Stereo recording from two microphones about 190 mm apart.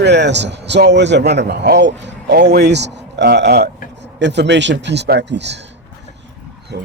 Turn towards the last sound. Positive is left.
turn(degrees=-60)  # may be behind; listen again after turning